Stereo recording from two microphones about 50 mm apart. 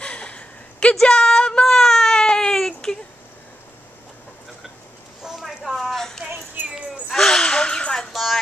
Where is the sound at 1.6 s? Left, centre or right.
Centre.